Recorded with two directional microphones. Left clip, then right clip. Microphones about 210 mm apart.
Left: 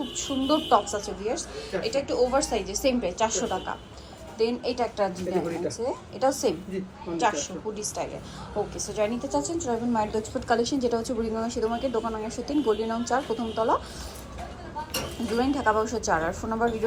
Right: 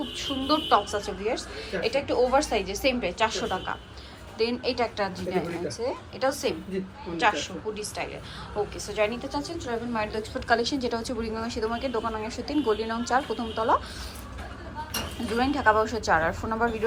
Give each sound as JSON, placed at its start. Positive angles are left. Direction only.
{"t": 0.2, "sound": "a woman's voice", "side_deg": 15}
{"t": 8.9, "sound": "a woman's voice", "side_deg": 15}
{"t": 15.4, "sound": "a woman's voice", "side_deg": 15}